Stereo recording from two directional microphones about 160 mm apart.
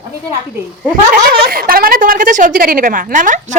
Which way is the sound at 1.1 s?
75° right (ahead or behind).